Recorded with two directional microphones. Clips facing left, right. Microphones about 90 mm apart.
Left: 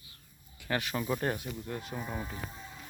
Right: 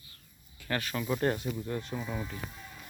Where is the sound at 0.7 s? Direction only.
15° left (ahead or behind).